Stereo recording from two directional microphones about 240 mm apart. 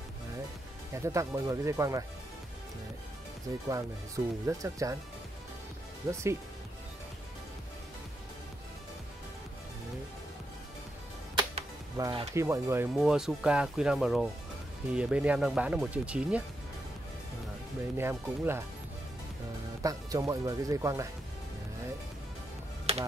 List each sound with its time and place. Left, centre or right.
0.9 s speech: centre
3.6 s speech: centre
6.0 s speech: centre
11.3 s speech: centre
17.9 s speech: centre
19.8 s speech: centre